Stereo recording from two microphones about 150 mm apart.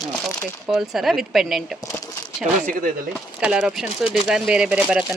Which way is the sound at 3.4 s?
5° right (ahead or behind).